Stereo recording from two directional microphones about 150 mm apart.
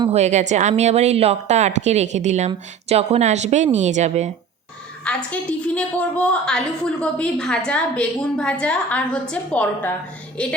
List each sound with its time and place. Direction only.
0.1 s a woman's voice: 50° right (ahead or behind)
5.0 s a woman's voice: 10° left (ahead or behind)